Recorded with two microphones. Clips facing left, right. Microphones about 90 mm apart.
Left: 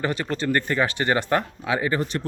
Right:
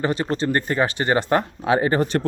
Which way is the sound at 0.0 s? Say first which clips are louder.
Right 3 dB; 25° right (ahead or behind).